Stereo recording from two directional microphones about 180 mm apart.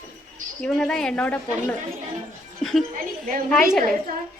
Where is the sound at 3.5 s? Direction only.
Centre (ahead or behind).